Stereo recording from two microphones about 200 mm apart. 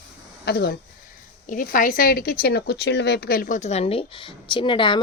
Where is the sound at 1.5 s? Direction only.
45° left (ahead or behind).